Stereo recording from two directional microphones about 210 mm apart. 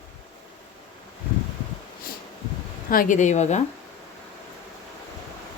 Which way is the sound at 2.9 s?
40° left (ahead or behind).